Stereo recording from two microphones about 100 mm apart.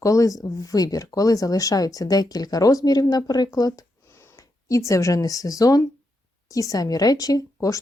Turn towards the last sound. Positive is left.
turn(degrees=35)  # may be behind; listen again after turning